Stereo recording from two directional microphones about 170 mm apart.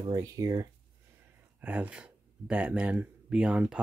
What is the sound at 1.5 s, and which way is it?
Speech, 10° right (ahead or behind).